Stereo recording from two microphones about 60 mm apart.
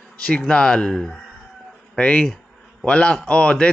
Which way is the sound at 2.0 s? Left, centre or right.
Centre.